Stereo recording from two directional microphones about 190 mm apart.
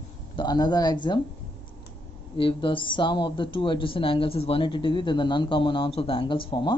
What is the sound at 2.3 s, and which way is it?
Speech, 25° left (ahead or behind).